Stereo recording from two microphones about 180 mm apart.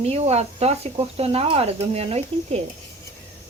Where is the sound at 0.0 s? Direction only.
35° right (ahead or behind).